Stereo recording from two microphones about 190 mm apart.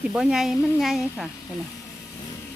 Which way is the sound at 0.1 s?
5° right (ahead or behind).